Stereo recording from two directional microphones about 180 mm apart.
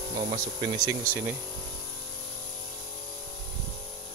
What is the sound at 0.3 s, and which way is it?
Speech, 25° right (ahead or behind).